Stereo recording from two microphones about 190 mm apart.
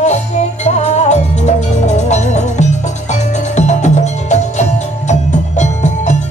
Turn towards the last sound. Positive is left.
turn(degrees=40)  # may be behind; listen again after turning